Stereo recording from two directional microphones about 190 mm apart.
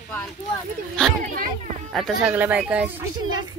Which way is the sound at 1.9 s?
5° right (ahead or behind).